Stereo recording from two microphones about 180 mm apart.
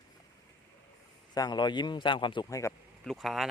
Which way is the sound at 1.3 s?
20° left (ahead or behind).